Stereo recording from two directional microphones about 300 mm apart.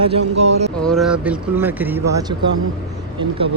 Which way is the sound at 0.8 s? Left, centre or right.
Centre.